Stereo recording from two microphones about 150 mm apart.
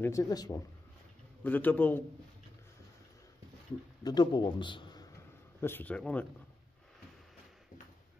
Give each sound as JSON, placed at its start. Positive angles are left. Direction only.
{"t": 0.0, "sound": "speech", "side_deg": 20}
{"t": 1.4, "sound": "a man's voice", "side_deg": 10}
{"t": 4.0, "sound": "a man's voice", "side_deg": 30}